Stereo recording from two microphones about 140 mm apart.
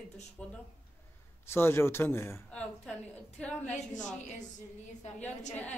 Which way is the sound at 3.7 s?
60° left (ahead or behind).